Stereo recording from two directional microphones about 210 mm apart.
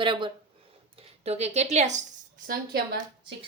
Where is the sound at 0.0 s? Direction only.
25° right (ahead or behind).